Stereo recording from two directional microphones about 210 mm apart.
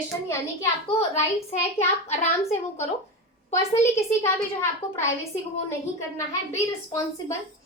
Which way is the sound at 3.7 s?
30° left (ahead or behind).